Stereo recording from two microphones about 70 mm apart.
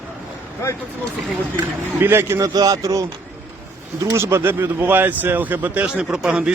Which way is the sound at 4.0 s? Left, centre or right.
Right.